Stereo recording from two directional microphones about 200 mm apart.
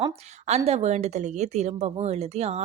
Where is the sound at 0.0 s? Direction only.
30° right (ahead or behind).